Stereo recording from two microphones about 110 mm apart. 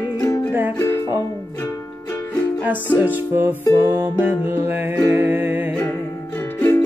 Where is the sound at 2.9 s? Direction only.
20° right (ahead or behind).